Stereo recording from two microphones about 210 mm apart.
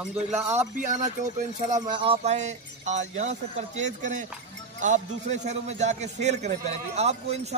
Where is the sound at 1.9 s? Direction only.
25° right (ahead or behind).